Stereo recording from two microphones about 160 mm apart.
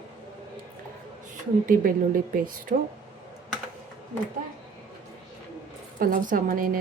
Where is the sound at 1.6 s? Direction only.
60° right (ahead or behind).